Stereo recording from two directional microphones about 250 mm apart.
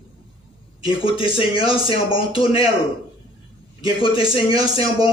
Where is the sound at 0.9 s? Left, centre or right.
Left.